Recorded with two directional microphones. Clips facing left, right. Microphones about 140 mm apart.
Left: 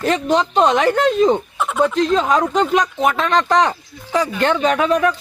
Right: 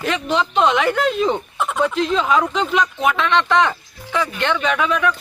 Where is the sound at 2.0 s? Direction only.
40° left (ahead or behind).